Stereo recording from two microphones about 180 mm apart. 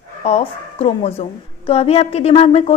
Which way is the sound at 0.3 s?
35° left (ahead or behind).